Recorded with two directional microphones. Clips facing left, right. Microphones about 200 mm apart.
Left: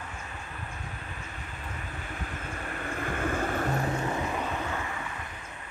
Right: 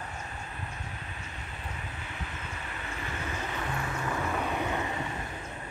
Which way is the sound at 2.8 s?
50° left (ahead or behind).